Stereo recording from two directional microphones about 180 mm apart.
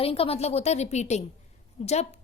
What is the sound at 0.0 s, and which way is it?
A woman's voice, 35° left (ahead or behind).